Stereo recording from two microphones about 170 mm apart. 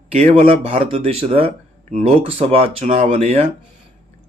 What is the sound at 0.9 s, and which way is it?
Speech, 35° right (ahead or behind).